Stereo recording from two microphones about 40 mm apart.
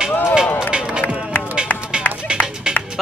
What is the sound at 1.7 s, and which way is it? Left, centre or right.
Music, left.